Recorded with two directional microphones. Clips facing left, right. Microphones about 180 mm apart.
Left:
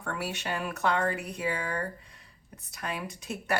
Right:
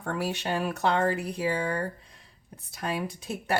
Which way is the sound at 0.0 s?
35° right (ahead or behind).